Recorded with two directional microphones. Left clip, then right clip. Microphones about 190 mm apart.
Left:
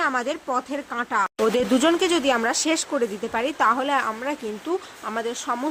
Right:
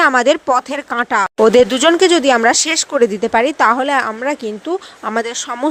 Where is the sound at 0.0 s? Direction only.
40° right (ahead or behind).